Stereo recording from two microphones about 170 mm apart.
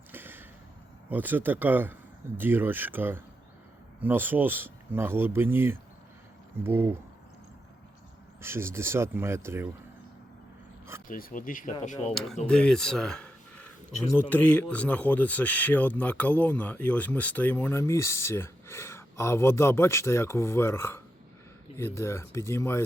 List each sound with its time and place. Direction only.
0.1 s a sound: 10° right (ahead or behind)
1.1 s speech: 10° right (ahead or behind)
8.4 s speech: 15° right (ahead or behind)
11.1 s speech: 55° left (ahead or behind)
12.1 s speech: centre (ahead or behind)